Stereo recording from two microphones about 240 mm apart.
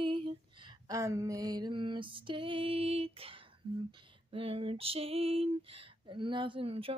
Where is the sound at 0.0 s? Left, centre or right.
Right.